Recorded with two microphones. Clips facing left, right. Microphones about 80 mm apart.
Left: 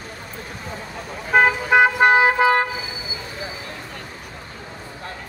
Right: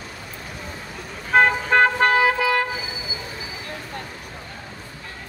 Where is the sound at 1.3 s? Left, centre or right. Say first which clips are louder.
Left 1 dB; centre; by 2.6 s left.